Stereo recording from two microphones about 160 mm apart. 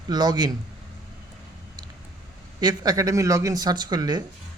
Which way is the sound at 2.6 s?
25° right (ahead or behind).